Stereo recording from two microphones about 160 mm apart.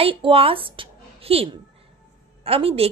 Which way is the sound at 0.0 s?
35° right (ahead or behind).